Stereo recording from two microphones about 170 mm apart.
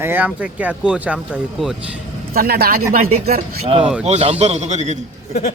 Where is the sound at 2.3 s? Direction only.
65° right (ahead or behind).